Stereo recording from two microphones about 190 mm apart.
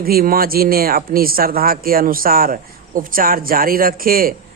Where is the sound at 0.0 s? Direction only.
50° right (ahead or behind).